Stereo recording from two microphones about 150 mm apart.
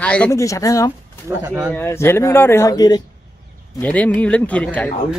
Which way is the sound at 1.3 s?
10° right (ahead or behind).